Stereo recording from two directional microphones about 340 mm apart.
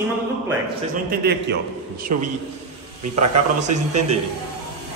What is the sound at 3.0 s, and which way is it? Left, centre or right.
Speech, right.